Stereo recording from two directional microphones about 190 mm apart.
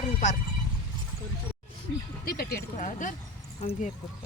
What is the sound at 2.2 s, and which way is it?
Speech, 50° left (ahead or behind).